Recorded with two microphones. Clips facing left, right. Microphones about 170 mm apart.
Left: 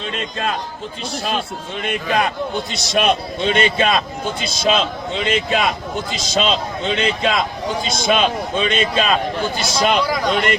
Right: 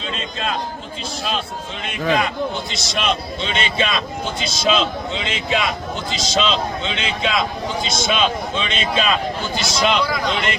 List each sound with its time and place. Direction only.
1.8 s speech: 50° left (ahead or behind)